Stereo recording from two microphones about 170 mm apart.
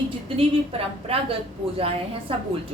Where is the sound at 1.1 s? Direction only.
35° right (ahead or behind).